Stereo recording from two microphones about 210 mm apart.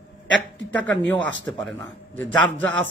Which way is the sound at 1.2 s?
60° right (ahead or behind).